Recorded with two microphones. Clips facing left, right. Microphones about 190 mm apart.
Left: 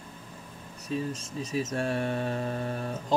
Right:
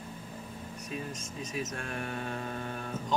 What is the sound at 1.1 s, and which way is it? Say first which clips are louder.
Speech: left 6 dB; 35° left (ahead or behind).